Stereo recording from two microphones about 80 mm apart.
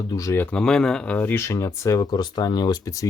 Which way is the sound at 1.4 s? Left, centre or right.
Left.